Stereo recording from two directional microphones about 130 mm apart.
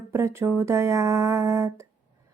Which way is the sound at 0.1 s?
20° right (ahead or behind).